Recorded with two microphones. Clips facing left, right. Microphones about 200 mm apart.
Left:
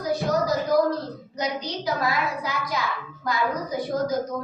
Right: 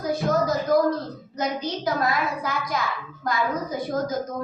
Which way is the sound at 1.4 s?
50° right (ahead or behind).